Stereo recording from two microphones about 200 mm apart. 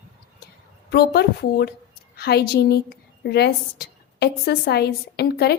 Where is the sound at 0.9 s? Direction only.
55° left (ahead or behind).